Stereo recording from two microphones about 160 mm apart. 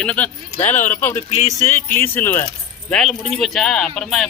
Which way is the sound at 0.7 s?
50° left (ahead or behind).